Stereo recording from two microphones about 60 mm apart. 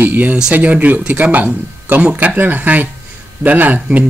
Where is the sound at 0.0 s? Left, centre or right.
Right.